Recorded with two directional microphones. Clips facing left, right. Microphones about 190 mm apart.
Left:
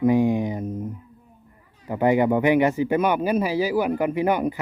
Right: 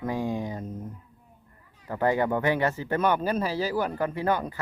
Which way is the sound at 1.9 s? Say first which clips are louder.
Left 5 dB; 15° left (ahead or behind).